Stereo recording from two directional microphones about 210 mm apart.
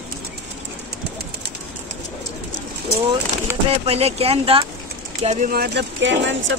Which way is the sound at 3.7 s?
30° right (ahead or behind).